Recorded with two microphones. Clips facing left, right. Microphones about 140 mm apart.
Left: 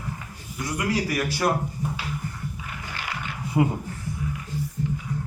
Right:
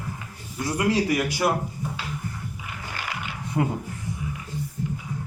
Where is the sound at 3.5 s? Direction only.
5° left (ahead or behind).